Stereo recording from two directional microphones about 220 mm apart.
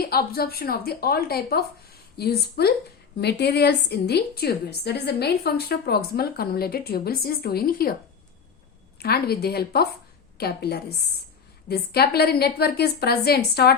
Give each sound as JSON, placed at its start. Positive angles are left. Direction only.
{"t": 0.1, "sound": "a woman's voice", "side_deg": 45}
{"t": 9.0, "sound": "a woman's voice", "side_deg": 45}